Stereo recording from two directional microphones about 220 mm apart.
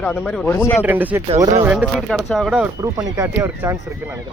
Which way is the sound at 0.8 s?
10° right (ahead or behind).